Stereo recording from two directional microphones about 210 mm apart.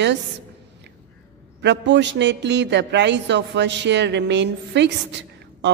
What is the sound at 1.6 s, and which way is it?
A man's voice, 55° right (ahead or behind).